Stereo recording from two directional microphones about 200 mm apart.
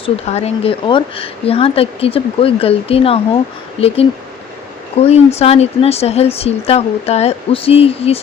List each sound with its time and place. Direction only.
0.0 s speech: 30° left (ahead or behind)